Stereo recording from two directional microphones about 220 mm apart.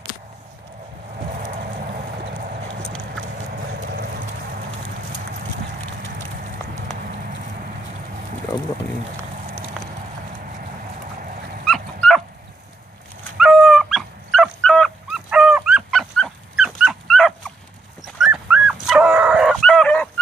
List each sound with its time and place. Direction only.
1.3 s vehicle: 35° right (ahead or behind)
11.6 s dog: centre (ahead or behind)
13.4 s dog: centre (ahead or behind)